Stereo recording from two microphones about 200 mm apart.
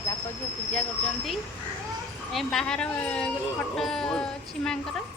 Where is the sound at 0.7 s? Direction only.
5° left (ahead or behind).